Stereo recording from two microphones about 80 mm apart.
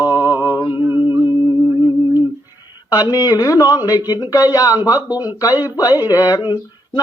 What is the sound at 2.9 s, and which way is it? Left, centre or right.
Speech, left.